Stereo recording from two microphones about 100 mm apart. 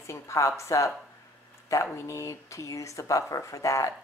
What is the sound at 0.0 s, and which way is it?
A woman's voice, 30° left (ahead or behind).